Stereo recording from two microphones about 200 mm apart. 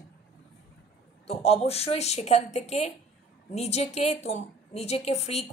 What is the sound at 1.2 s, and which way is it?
A woman's voice, 30° left (ahead or behind).